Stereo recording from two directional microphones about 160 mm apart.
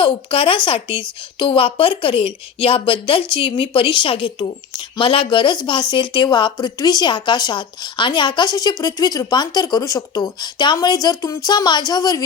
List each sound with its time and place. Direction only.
0.0 s a woman's voice: 35° left (ahead or behind)